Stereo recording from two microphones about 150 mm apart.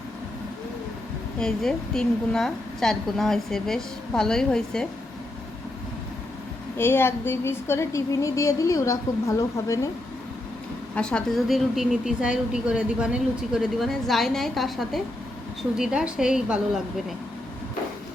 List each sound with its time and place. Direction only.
1.4 s a woman's voice: 5° left (ahead or behind)
6.7 s a woman's voice: 15° left (ahead or behind)
10.9 s a woman's voice: 5° left (ahead or behind)